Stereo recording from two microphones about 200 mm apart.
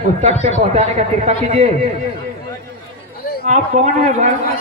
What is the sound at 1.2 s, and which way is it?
Speech, 30° right (ahead or behind).